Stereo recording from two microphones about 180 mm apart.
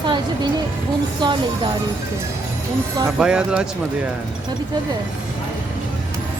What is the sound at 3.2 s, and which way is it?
Speech, 5° right (ahead or behind).